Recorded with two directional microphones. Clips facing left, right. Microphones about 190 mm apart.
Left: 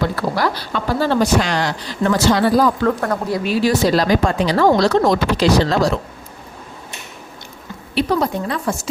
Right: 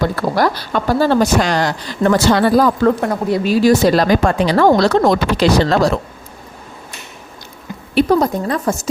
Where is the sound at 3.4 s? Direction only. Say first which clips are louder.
Right 5 dB; 40° right (ahead or behind); by 5.9 s 60° right (ahead or behind).